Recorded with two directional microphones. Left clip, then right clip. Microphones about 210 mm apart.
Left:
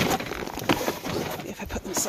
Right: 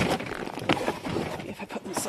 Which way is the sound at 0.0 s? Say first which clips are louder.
Left 2 dB; 30° left (ahead or behind).